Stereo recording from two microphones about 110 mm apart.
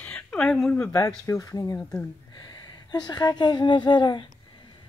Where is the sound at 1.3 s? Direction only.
30° left (ahead or behind).